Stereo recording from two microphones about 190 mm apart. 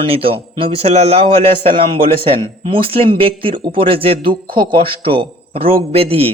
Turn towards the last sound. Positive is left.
turn(degrees=-30)  # may be behind; listen again after turning